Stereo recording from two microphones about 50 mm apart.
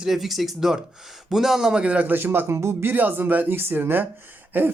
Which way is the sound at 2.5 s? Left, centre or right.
Right.